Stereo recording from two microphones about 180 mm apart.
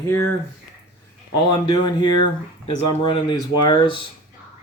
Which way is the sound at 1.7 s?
25° left (ahead or behind).